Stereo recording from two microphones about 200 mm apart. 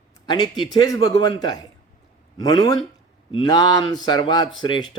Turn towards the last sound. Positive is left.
turn(degrees=25)  # may be behind; listen again after turning